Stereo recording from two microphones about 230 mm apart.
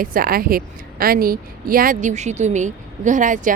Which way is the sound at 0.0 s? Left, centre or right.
Right.